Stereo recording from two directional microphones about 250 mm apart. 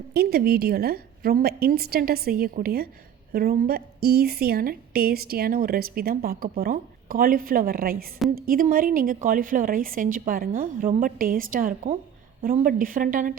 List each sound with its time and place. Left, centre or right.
0.1 s a woman's voice: right